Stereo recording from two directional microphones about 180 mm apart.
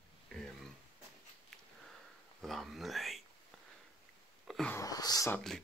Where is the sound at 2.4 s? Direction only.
Centre (ahead or behind).